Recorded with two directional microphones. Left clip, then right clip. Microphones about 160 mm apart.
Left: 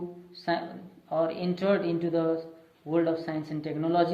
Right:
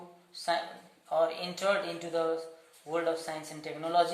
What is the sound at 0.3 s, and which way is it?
A woman's voice, 15° right (ahead or behind).